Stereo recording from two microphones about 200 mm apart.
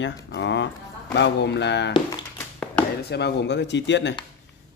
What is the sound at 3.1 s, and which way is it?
Speech, 55° left (ahead or behind).